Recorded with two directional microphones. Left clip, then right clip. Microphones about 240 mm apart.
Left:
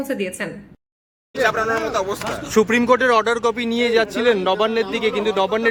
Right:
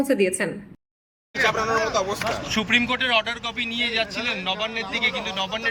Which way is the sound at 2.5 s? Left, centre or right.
Centre.